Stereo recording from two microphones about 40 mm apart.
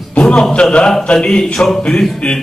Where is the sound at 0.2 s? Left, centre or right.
Left.